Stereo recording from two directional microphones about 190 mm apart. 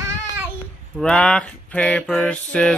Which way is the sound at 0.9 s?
5° left (ahead or behind).